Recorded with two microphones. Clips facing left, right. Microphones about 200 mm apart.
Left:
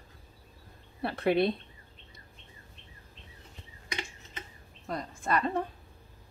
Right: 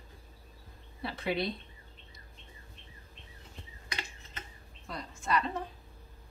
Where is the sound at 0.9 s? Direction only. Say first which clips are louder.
Left 7 dB; 60° left (ahead or behind).